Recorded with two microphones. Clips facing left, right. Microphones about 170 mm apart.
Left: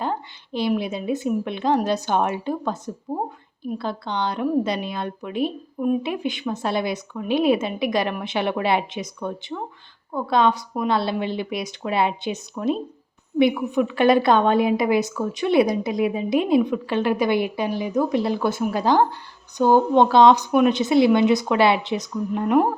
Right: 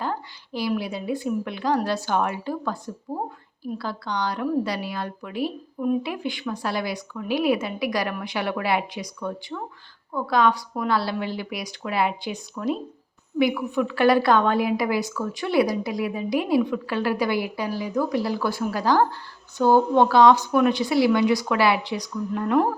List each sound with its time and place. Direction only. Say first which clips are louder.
0.0 s a woman's voice: left 2 dB; 20° left (ahead or behind)